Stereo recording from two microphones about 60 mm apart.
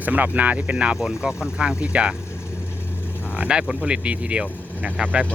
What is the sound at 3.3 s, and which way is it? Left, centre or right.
Speech, centre.